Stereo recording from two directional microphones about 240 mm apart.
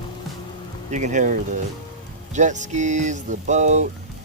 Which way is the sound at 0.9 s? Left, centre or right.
Right.